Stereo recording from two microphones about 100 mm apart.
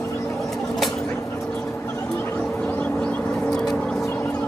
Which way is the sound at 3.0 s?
10° left (ahead or behind).